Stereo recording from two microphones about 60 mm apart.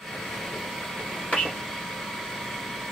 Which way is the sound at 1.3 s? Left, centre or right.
Centre.